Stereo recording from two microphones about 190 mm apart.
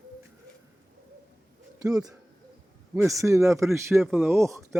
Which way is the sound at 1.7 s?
20° right (ahead or behind).